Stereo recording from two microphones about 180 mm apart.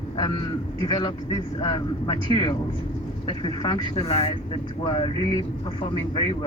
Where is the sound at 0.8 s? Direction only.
25° left (ahead or behind).